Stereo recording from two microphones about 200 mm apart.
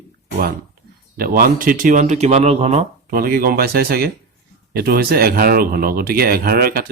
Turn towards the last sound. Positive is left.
turn(degrees=-50)  # may be behind; listen again after turning